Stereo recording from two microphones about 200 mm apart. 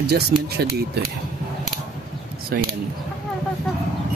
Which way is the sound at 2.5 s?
50° right (ahead or behind).